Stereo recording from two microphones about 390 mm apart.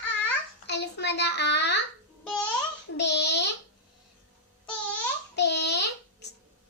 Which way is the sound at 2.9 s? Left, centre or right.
Left.